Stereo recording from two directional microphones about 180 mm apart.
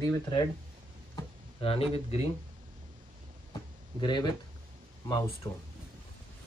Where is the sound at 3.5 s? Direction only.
25° left (ahead or behind).